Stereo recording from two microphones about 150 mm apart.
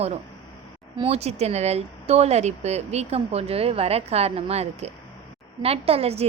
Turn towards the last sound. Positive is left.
turn(degrees=-40)  # may be behind; listen again after turning